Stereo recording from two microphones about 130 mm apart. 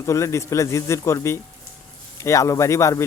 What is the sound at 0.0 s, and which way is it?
Speech, 25° left (ahead or behind).